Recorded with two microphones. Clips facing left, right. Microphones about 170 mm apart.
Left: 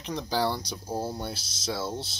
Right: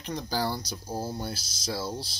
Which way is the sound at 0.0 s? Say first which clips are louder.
Left 2 dB; centre (ahead or behind).